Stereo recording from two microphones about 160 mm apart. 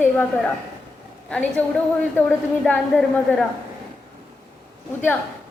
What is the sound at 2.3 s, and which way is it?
Speech, 10° left (ahead or behind).